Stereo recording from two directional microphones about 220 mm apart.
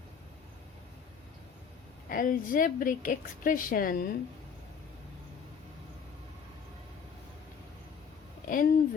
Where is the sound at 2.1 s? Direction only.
40° left (ahead or behind).